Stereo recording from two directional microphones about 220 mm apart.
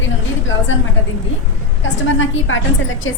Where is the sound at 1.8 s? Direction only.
60° left (ahead or behind).